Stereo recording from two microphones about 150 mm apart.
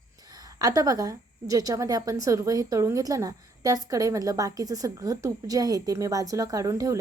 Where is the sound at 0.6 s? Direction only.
25° right (ahead or behind).